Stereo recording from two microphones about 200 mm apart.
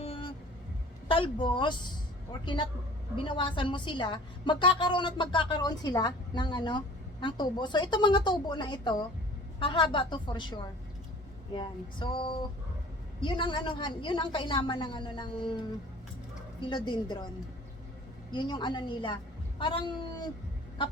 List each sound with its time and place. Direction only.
0.0 s vehicle: 25° left (ahead or behind)
1.0 s a woman's voice: 25° left (ahead or behind)
18.3 s a woman's voice: 20° left (ahead or behind)